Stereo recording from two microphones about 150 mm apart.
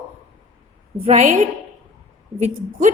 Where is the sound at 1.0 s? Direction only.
50° right (ahead or behind).